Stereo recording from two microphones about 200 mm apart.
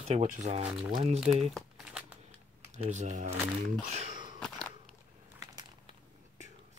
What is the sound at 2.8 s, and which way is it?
Speech, 35° right (ahead or behind).